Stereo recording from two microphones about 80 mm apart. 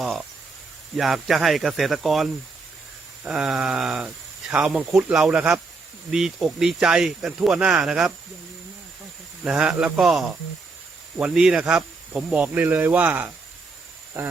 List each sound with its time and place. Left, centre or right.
0.0 s speech: centre
4.0 s speech: centre
4.6 s speech: centre
9.4 s speech: centre